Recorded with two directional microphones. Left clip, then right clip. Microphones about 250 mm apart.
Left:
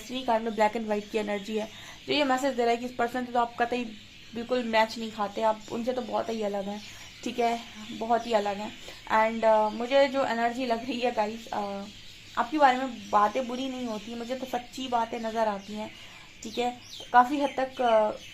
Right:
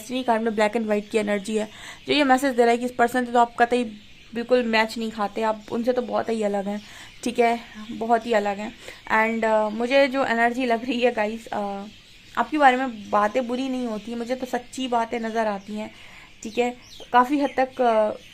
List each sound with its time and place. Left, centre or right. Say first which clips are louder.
0.1 s speech: right 5 dB; right